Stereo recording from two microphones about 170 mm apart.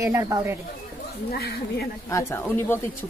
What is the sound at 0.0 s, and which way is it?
Speech, 20° right (ahead or behind).